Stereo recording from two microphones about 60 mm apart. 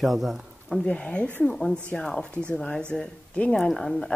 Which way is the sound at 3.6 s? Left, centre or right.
Centre.